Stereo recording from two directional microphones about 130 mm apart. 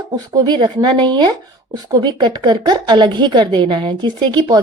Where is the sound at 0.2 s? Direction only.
30° right (ahead or behind).